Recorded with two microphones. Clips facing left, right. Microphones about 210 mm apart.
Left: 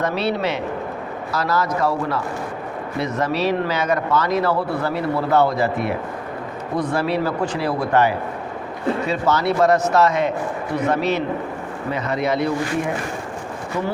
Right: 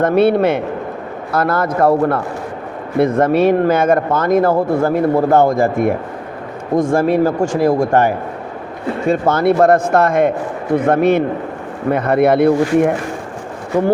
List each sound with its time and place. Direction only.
0.0 s speech: 55° right (ahead or behind)